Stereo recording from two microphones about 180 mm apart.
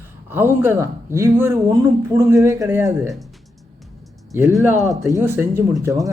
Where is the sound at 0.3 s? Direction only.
10° right (ahead or behind).